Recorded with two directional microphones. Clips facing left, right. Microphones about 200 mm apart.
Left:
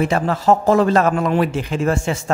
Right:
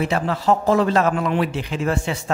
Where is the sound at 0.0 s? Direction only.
45° left (ahead or behind).